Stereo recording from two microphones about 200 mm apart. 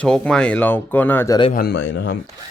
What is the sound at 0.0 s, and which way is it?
Speech, 5° left (ahead or behind).